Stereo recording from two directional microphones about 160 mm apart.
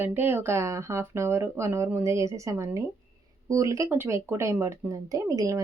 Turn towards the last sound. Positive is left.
turn(degrees=-20)  # may be behind; listen again after turning